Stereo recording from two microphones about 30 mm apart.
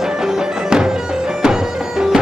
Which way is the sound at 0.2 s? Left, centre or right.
Right.